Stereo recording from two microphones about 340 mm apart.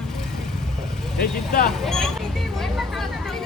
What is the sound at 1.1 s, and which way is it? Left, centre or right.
Speech, left.